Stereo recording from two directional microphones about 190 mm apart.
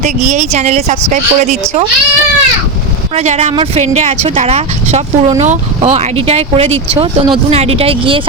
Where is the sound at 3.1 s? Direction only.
35° right (ahead or behind).